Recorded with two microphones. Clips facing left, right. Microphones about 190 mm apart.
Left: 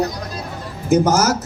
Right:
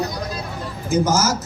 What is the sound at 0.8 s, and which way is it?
Speech, 65° left (ahead or behind).